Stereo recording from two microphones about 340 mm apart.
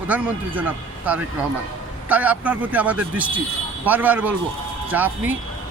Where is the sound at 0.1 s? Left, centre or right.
Centre.